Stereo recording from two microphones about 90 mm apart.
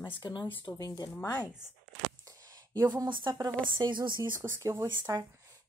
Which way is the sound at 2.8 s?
50° right (ahead or behind).